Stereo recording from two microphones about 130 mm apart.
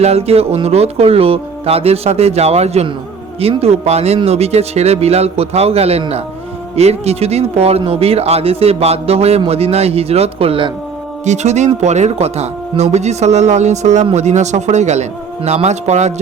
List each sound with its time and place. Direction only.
0.0 s music: 50° right (ahead or behind)
11.3 s speech: 65° right (ahead or behind)